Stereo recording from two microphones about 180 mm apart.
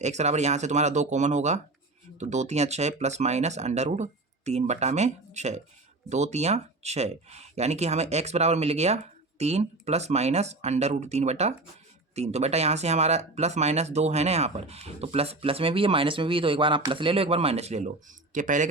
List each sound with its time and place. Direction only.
0.0 s speech: 40° right (ahead or behind)